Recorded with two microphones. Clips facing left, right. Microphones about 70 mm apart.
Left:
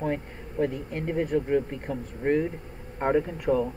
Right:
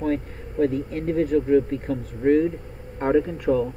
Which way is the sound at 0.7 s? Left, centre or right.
Left.